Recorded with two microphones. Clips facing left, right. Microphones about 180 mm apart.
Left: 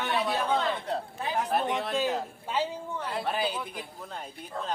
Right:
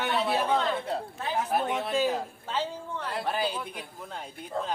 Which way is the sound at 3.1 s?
Centre (ahead or behind).